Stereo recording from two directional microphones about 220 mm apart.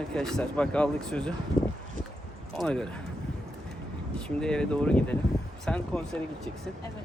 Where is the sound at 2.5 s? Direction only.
Centre (ahead or behind).